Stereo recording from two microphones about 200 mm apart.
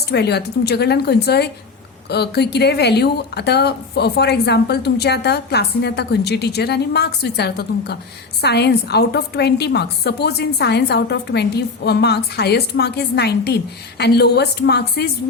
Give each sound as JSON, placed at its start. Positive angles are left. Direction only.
{"t": 0.1, "sound": "a woman's voice", "side_deg": 55}